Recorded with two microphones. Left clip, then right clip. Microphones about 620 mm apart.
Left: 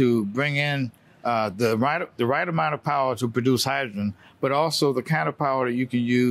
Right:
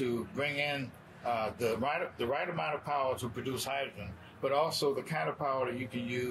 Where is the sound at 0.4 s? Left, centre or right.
Left.